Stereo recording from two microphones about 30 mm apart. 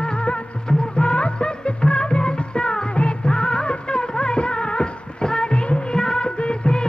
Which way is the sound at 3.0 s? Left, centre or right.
Left.